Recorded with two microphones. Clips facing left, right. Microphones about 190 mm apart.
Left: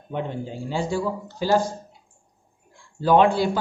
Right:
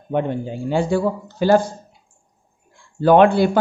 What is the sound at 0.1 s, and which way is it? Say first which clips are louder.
Speech: right 7 dB; 60° right (ahead or behind).